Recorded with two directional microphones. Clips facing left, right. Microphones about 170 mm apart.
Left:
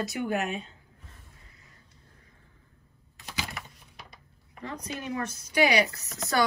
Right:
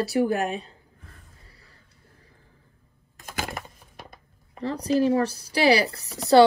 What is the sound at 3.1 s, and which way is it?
Wood, 50° right (ahead or behind).